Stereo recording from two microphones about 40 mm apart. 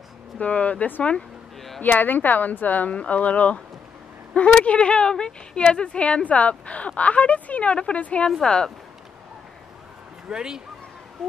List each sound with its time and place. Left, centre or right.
0.4 s speech: left
3.0 s a woman's voice: left
8.4 s a woman's voice: centre
10.3 s speech: centre